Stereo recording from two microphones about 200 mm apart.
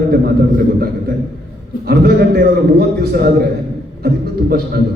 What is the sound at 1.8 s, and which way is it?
A man's voice, 55° right (ahead or behind).